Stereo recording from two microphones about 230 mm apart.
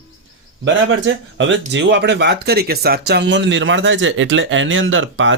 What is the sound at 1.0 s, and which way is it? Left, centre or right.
Speech, right.